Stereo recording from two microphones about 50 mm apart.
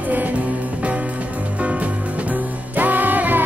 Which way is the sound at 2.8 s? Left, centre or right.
Right.